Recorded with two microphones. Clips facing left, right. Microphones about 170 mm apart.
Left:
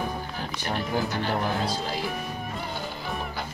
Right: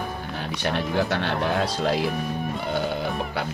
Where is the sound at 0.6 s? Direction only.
75° right (ahead or behind).